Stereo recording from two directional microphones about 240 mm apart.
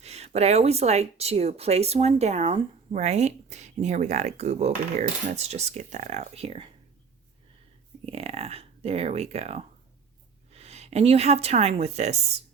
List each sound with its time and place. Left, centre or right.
0.0 s speech: right
8.0 s speech: right